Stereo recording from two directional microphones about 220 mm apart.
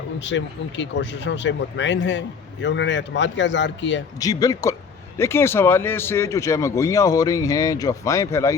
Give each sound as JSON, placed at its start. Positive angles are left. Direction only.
{"t": 0.3, "sound": "speech", "side_deg": 55}
{"t": 4.2, "sound": "speech", "side_deg": 15}